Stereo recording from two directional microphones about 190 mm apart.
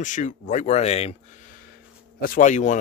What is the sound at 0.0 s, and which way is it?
Speech, 40° left (ahead or behind).